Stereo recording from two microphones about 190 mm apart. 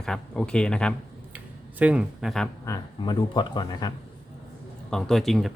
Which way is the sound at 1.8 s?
5° right (ahead or behind).